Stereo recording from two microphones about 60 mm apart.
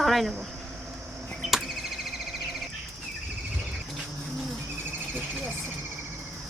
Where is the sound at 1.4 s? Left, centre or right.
Centre.